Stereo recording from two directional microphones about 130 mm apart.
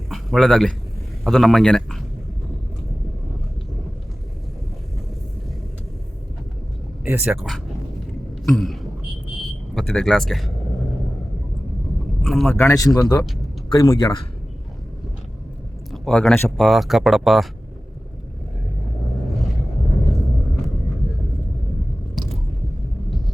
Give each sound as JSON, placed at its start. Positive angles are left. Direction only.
{"t": 0.1, "sound": "a sound", "side_deg": 0}
{"t": 1.2, "sound": "speech", "side_deg": 0}
{"t": 7.0, "sound": "speech", "side_deg": -15}
{"t": 7.3, "sound": "speech", "side_deg": 0}
{"t": 12.2, "sound": "speech", "side_deg": 0}
{"t": 12.5, "sound": "speech", "side_deg": 25}
{"t": 13.7, "sound": "speech", "side_deg": 40}
{"t": 15.9, "sound": "speech", "side_deg": 5}